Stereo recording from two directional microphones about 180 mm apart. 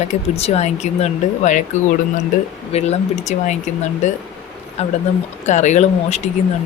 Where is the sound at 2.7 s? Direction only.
35° left (ahead or behind).